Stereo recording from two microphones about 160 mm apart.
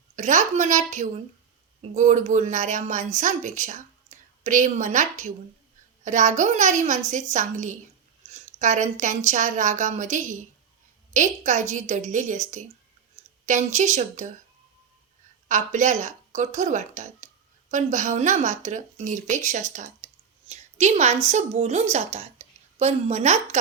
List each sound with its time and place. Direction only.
0.2 s a woman's voice: 50° right (ahead or behind)
15.4 s a woman's voice: 50° right (ahead or behind)